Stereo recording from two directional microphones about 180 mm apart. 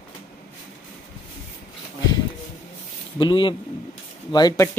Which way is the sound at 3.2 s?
25° left (ahead or behind).